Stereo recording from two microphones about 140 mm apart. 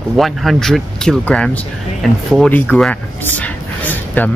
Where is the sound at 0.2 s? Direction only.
Centre (ahead or behind).